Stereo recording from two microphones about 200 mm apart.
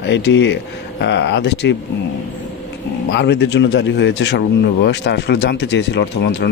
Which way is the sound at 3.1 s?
60° left (ahead or behind).